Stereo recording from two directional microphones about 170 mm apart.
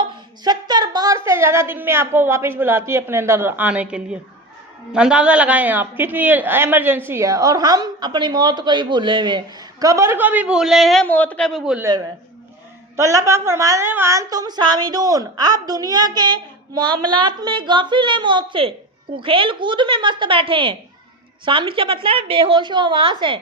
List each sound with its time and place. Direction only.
0.4 s a woman's voice: 25° right (ahead or behind); by 11.8 s centre (ahead or behind)
11.8 s a woman's voice: 20° right (ahead or behind)